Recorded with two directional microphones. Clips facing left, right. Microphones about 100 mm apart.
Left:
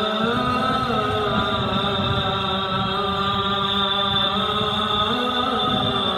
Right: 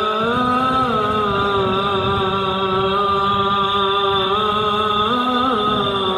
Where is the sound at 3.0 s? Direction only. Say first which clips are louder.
Right 6 dB; 45° right (ahead or behind).